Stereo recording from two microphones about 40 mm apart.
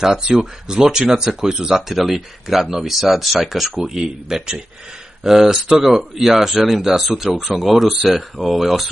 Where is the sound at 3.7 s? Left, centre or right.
Centre.